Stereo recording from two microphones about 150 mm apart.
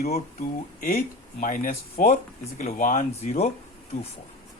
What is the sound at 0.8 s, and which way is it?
Speech, 70° left (ahead or behind).